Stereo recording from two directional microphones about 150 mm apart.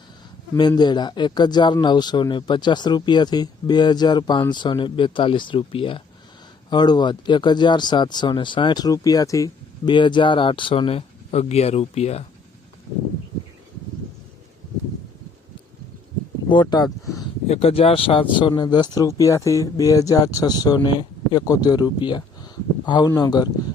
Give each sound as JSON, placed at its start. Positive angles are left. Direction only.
{"t": 0.8, "sound": "speech", "side_deg": 30}
{"t": 16.5, "sound": "speech", "side_deg": 30}
{"t": 17.5, "sound": "speech", "side_deg": 40}